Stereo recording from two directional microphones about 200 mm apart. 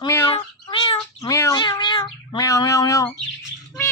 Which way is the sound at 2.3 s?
20° left (ahead or behind).